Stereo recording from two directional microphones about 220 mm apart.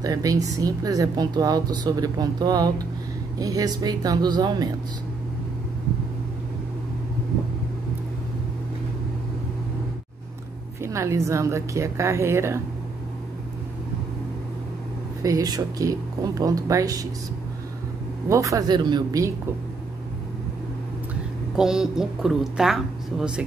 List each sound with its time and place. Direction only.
0.0 s a woman's voice: 15° right (ahead or behind)
10.8 s a woman's voice: 15° right (ahead or behind)
15.2 s a woman's voice: 15° right (ahead or behind)
18.3 s a woman's voice: 15° right (ahead or behind)
21.5 s speech: 5° right (ahead or behind)